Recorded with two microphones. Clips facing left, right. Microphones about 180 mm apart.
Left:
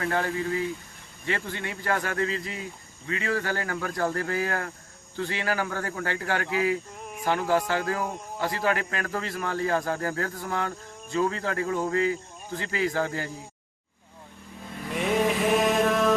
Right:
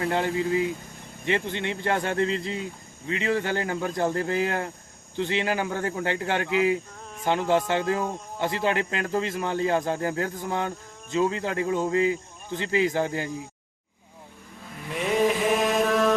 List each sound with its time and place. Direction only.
0.0 s speech: 20° right (ahead or behind)
14.8 s mantra: centre (ahead or behind)